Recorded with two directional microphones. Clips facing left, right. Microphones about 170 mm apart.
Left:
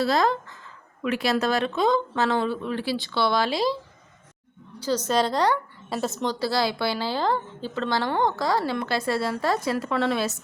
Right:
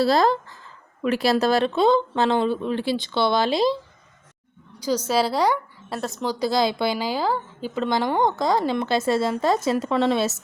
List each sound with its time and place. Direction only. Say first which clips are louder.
0.0 s speech: right 3 dB; 35° right (ahead or behind)
4.8 s a woman's voice: right 1 dB; 10° right (ahead or behind)
5.9 s a woman's voice: left 1 dB; centre (ahead or behind)
6.2 s speech: right 4 dB; 15° right (ahead or behind)